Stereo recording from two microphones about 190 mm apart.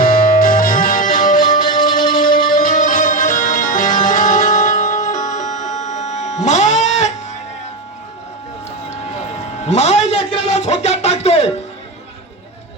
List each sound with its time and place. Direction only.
0.0 s music: 45° left (ahead or behind)
6.4 s cat: 40° left (ahead or behind)
9.6 s a sound: 35° left (ahead or behind)